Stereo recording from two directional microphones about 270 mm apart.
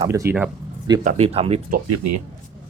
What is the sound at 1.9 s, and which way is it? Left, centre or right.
Speech, right.